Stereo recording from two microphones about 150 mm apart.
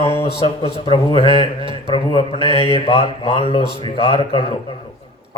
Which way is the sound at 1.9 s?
35° left (ahead or behind).